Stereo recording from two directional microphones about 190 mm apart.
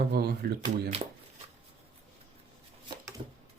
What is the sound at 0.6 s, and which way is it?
Speech, 30° right (ahead or behind).